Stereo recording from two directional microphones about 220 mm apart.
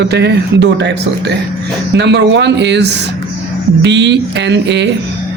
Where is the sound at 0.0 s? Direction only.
50° right (ahead or behind).